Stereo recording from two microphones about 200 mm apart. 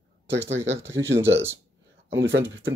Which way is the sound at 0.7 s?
70° right (ahead or behind).